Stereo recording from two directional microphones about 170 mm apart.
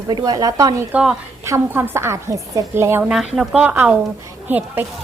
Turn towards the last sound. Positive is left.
turn(degrees=-10)  # may be behind; listen again after turning